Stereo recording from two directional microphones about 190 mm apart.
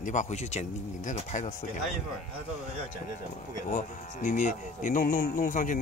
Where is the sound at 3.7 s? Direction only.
45° left (ahead or behind).